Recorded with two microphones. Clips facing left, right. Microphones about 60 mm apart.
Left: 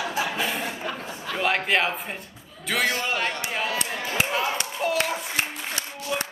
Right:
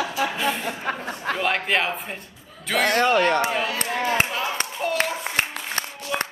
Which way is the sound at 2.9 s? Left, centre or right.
Right.